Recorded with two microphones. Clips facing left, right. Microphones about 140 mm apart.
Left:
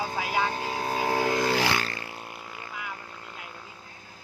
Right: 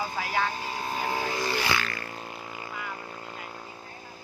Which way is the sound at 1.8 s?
30° left (ahead or behind).